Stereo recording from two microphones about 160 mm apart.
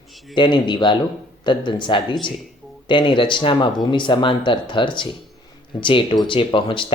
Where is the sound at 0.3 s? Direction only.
30° left (ahead or behind).